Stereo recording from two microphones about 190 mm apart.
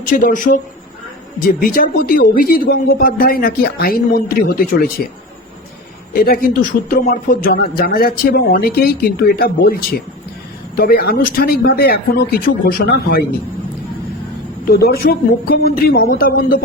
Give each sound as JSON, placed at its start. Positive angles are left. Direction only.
{"t": 0.1, "sound": "speech", "side_deg": 45}
{"t": 6.2, "sound": "speech", "side_deg": 50}
{"t": 14.7, "sound": "speech", "side_deg": 55}